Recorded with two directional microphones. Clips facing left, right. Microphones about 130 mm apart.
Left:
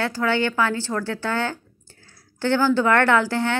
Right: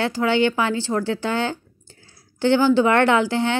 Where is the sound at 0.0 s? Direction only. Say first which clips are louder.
Right 3 dB; 20° right (ahead or behind).